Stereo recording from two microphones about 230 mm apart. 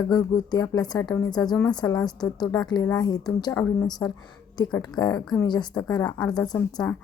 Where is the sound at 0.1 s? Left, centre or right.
Centre.